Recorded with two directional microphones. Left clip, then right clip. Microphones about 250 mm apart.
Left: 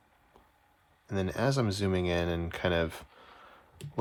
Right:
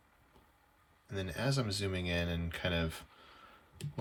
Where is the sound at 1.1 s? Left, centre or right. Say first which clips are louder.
Left 7 dB; left.